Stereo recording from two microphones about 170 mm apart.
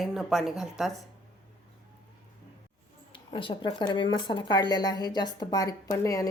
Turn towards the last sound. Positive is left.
turn(degrees=20)  # may be behind; listen again after turning